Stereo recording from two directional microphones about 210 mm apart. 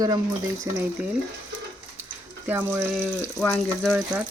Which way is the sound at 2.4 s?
10° right (ahead or behind).